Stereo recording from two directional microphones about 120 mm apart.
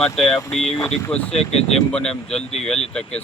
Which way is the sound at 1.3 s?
60° left (ahead or behind).